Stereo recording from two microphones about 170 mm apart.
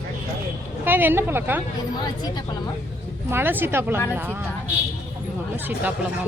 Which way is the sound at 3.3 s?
10° right (ahead or behind).